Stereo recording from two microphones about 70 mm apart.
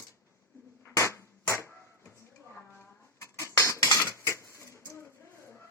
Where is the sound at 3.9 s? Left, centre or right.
Left.